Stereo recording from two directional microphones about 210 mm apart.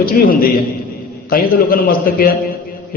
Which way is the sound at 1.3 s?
45° left (ahead or behind).